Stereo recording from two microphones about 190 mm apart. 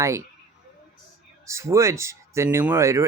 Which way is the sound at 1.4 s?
15° right (ahead or behind).